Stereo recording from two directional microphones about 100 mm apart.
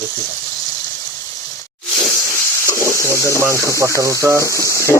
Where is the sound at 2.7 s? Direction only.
30° left (ahead or behind).